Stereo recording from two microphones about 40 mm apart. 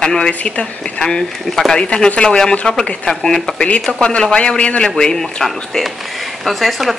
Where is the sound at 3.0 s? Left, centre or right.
Centre.